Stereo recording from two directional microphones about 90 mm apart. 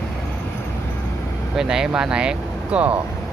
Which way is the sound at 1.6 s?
5° right (ahead or behind).